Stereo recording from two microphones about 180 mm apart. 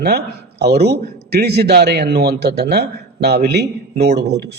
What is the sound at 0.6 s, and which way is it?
A man's voice, 65° right (ahead or behind).